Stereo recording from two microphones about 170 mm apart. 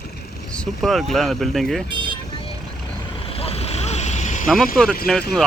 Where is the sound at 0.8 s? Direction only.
Centre (ahead or behind).